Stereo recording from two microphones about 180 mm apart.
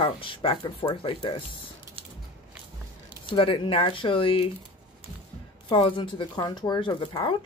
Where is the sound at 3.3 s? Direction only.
30° left (ahead or behind).